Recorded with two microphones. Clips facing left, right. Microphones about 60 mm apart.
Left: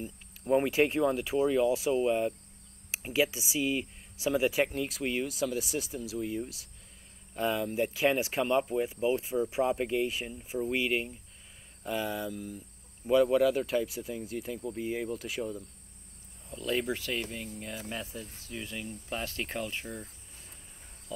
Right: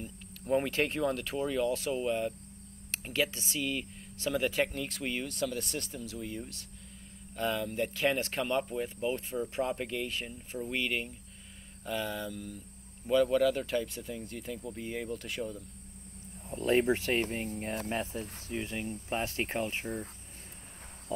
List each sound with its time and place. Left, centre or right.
0.0 s speech: centre
16.4 s speech: right